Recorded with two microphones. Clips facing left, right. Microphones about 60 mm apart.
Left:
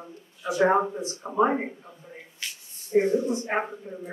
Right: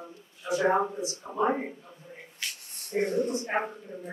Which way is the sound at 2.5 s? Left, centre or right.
Right.